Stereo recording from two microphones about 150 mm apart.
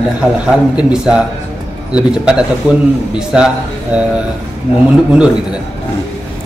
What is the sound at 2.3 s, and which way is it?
A man's voice, 5° right (ahead or behind).